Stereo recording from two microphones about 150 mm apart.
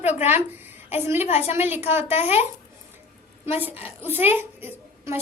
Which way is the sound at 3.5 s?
10° right (ahead or behind).